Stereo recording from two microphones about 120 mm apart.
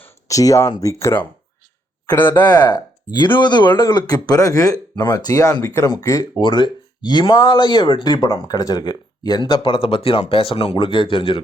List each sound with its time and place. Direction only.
0.3 s speech: 30° left (ahead or behind)
2.4 s speech: 35° left (ahead or behind)
6.4 s speech: 40° left (ahead or behind)